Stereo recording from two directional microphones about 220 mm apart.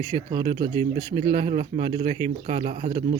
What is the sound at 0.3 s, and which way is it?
Speech, 20° right (ahead or behind).